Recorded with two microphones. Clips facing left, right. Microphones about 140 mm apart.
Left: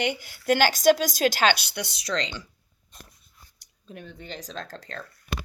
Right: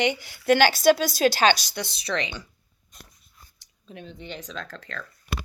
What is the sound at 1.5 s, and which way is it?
Speech, 60° left (ahead or behind).